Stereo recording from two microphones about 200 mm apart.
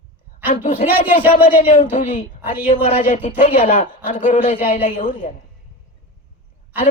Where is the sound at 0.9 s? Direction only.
10° right (ahead or behind).